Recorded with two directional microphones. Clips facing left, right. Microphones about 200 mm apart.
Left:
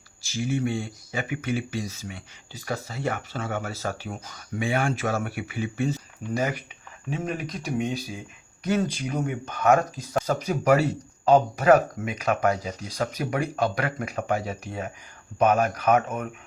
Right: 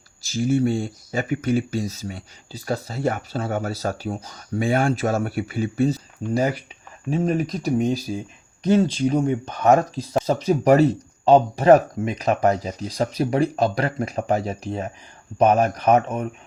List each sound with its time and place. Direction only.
0.3 s speech: 40° right (ahead or behind)